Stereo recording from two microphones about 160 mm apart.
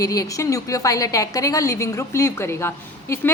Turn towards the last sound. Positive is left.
turn(degrees=15)  # may be behind; listen again after turning